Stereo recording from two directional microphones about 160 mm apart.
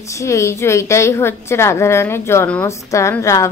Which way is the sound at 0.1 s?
20° left (ahead or behind).